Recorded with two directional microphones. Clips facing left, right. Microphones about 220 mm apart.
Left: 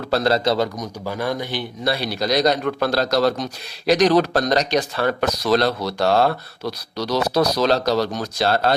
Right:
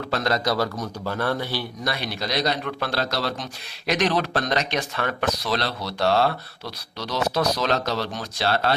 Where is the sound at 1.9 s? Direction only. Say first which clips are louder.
Left 8 dB; 35° left (ahead or behind).